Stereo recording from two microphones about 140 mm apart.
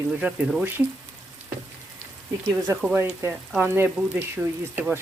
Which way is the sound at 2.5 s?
15° right (ahead or behind).